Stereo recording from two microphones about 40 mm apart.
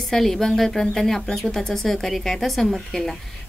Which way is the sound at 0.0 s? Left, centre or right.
Centre.